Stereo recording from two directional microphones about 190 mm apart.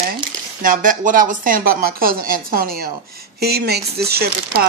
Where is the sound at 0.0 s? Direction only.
50° right (ahead or behind).